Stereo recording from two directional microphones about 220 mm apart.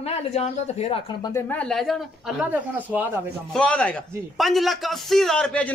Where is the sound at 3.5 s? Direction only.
5° left (ahead or behind).